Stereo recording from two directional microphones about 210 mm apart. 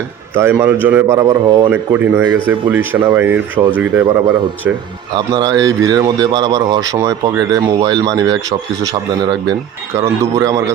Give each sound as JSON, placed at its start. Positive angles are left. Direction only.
{"t": 0.3, "sound": "a man's voice", "side_deg": -10}
{"t": 5.1, "sound": "speech", "side_deg": -20}
{"t": 10.0, "sound": "a man's voice", "side_deg": -15}